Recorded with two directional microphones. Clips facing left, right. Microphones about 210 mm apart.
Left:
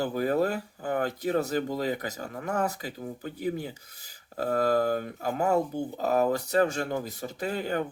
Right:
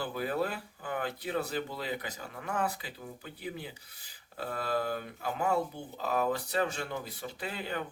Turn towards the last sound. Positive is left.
turn(degrees=45)  # may be behind; listen again after turning